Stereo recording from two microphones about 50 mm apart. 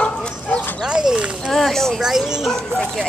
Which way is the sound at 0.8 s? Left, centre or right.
Centre.